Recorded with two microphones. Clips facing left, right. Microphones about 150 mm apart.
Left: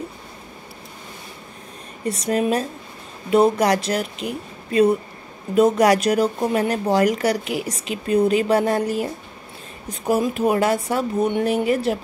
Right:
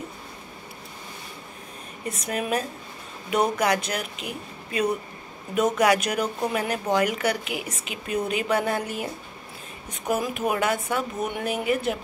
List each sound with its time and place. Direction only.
2.0 s speech: 35° left (ahead or behind)
5.5 s speech: 35° left (ahead or behind)
10.0 s speech: 30° left (ahead or behind)